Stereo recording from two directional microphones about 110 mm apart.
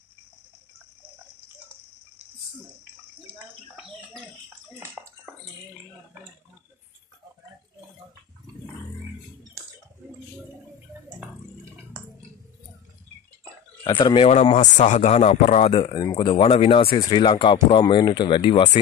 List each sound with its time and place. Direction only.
4.7 s bathtub: 20° right (ahead or behind)
13.8 s speech: 45° left (ahead or behind)
14.2 s speech: 65° left (ahead or behind)
15.8 s speech: 40° left (ahead or behind)
16.2 s speech: 55° left (ahead or behind)
17.0 s speech: 45° left (ahead or behind)